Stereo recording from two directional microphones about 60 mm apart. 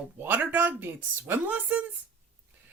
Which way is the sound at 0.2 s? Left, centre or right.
Right.